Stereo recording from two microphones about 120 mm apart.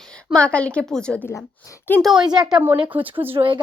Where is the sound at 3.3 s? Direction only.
45° right (ahead or behind).